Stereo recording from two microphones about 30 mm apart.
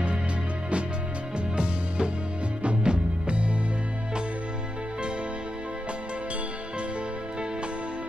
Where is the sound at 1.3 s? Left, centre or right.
Right.